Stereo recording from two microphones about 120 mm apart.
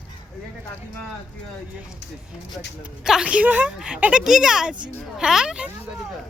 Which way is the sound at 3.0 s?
5° right (ahead or behind).